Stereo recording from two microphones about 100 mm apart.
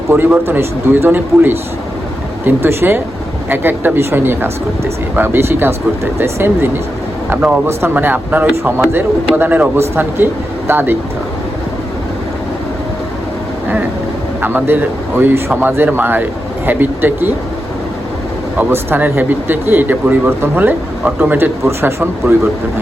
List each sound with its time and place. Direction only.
0.1 s speech: 20° right (ahead or behind)
14.4 s speech: 20° right (ahead or behind)
18.5 s speech: 20° right (ahead or behind)